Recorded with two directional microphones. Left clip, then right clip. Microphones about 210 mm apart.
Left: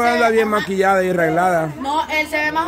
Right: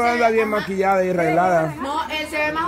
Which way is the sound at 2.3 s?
45° left (ahead or behind).